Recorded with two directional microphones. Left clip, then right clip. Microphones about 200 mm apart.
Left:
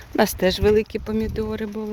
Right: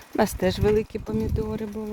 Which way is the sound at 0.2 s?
Centre (ahead or behind).